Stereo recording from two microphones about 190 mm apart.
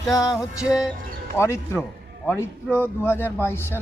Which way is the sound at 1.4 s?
15° left (ahead or behind).